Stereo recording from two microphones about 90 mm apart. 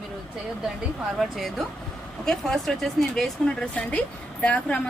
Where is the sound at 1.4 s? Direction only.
Centre (ahead or behind).